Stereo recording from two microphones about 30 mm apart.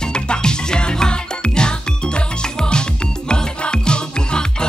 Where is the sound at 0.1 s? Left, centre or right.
Left.